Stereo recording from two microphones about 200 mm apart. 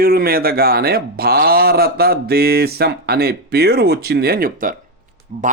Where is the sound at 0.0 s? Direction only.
50° right (ahead or behind).